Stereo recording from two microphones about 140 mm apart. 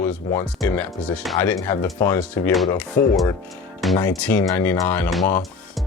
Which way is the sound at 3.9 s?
30° left (ahead or behind).